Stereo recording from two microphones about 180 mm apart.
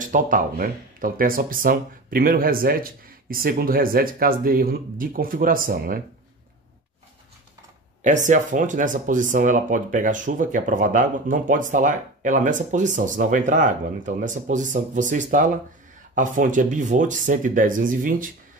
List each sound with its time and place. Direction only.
0.0 s speech: 45° right (ahead or behind)
8.0 s speech: 45° right (ahead or behind)